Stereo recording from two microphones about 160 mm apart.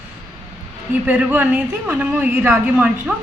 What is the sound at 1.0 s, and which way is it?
Speech, 10° right (ahead or behind).